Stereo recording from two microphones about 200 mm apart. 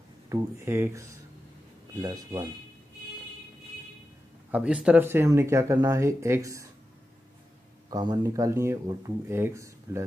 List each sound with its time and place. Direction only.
0.3 s speech: 10° right (ahead or behind)
4.5 s speech: 5° right (ahead or behind)
7.9 s speech: 20° right (ahead or behind)